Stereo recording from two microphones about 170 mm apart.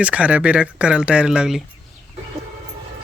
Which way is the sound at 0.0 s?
5° right (ahead or behind).